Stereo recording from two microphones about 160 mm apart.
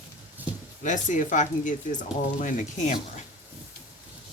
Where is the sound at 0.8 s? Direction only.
50° left (ahead or behind).